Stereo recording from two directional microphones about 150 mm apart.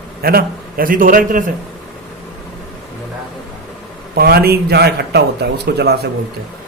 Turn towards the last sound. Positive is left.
turn(degrees=-90)